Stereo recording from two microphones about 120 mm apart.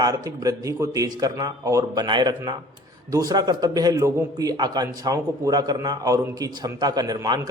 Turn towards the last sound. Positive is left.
turn(degrees=-30)  # may be behind; listen again after turning